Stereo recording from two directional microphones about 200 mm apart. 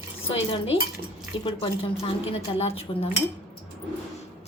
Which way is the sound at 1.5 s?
30° left (ahead or behind).